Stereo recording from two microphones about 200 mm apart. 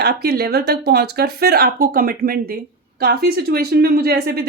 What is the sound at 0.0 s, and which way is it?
Speech, 55° right (ahead or behind).